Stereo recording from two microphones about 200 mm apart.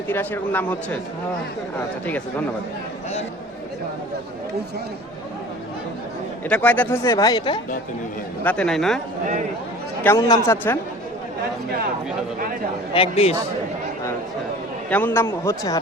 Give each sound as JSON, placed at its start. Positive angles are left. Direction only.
{"t": 0.1, "sound": "speech", "side_deg": 10}
{"t": 6.5, "sound": "speech", "side_deg": 5}
{"t": 8.4, "sound": "speech", "side_deg": 5}
{"t": 10.0, "sound": "speech", "side_deg": 15}
{"t": 12.9, "sound": "speech", "side_deg": 30}
{"t": 14.8, "sound": "speech", "side_deg": 10}